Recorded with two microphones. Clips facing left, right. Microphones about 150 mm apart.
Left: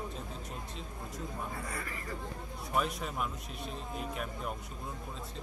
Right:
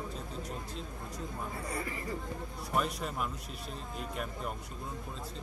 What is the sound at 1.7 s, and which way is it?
Speech, 30° right (ahead or behind).